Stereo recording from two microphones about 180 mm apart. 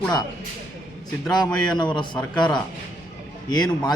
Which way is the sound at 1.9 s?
25° left (ahead or behind).